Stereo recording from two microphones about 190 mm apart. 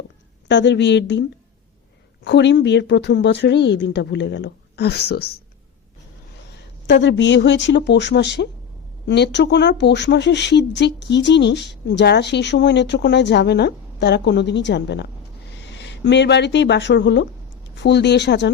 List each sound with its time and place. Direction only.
0.4 s speech: 70° left (ahead or behind)
2.2 s speech: 65° left (ahead or behind)
6.5 s speech: 65° left (ahead or behind)